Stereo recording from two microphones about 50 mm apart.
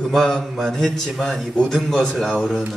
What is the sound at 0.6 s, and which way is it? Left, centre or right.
Speech, centre.